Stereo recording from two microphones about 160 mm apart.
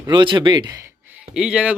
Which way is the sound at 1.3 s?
5° right (ahead or behind).